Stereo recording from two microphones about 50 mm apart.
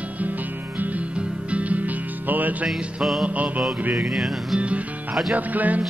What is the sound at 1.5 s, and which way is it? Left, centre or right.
Music, right.